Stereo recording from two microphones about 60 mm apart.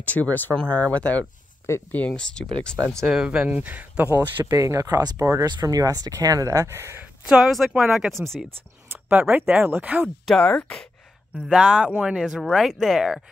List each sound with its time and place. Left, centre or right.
0.0 s speech: left
2.1 s speech: centre
3.1 s speech: centre
3.5 s speech: right
4.5 s speech: right
6.7 s speech: right
7.2 s speech: centre
8.9 s speech: right
10.0 s speech: centre
11.3 s speech: centre
12.4 s speech: centre